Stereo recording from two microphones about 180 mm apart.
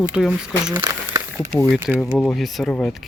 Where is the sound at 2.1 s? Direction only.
Centre (ahead or behind).